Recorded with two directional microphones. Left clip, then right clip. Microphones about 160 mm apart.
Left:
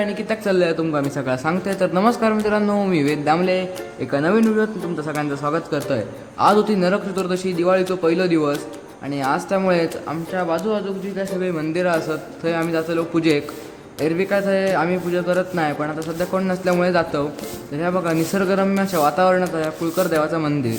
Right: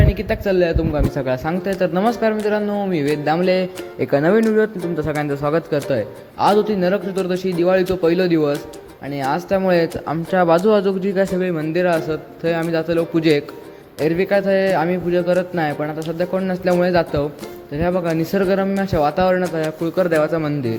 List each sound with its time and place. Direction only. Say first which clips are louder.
0.0 s a sound: right 2 dB; 25° right (ahead or behind)
0.4 s speech: right 1 dB; 10° right (ahead or behind)
3.4 s speech: right 2 dB; 25° right (ahead or behind)
10.3 s speech: right 8 dB; 45° right (ahead or behind)
11.3 s speech: right 2 dB; 30° right (ahead or behind)